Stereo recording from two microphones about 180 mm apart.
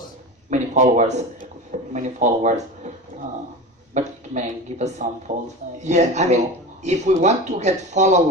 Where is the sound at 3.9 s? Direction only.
40° right (ahead or behind).